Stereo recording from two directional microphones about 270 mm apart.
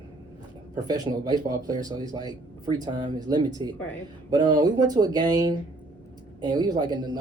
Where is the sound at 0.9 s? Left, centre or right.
Centre.